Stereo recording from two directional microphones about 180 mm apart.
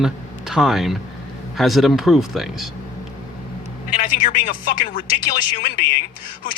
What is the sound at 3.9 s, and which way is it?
Speech, 45° left (ahead or behind).